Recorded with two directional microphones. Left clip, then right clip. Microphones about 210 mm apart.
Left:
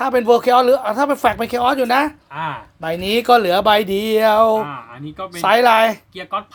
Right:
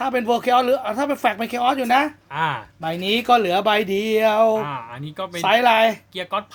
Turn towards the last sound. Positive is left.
turn(degrees=-35)  # may be behind; listen again after turning